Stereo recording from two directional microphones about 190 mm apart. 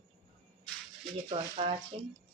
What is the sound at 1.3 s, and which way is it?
Speech, 30° right (ahead or behind).